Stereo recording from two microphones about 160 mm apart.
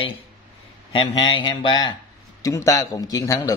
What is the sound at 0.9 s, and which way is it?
A man's voice, 30° left (ahead or behind).